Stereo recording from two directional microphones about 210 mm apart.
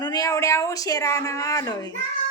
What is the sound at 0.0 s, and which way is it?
Speech, 20° left (ahead or behind).